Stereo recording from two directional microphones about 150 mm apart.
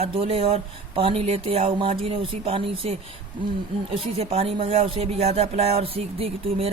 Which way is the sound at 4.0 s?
45° right (ahead or behind).